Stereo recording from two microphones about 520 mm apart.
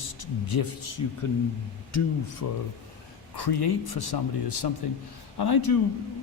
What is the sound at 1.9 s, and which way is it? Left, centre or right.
Speech, left.